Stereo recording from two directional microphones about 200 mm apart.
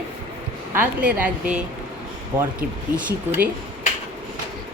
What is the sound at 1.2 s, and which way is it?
A woman's voice, 5° right (ahead or behind).